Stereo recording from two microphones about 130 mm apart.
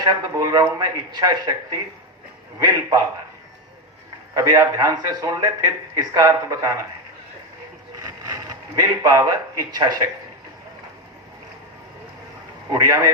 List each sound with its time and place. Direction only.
0.0 s speech: 30° right (ahead or behind)
2.6 s a man's voice: 25° right (ahead or behind)
4.4 s a man's voice: 25° right (ahead or behind)
7.9 s a man's voice: 30° right (ahead or behind)
12.7 s a man's voice: 25° right (ahead or behind)